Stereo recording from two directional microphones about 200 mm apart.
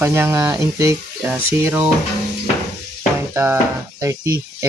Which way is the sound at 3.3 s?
10° right (ahead or behind).